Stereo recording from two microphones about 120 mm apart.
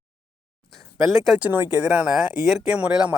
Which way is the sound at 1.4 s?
15° right (ahead or behind).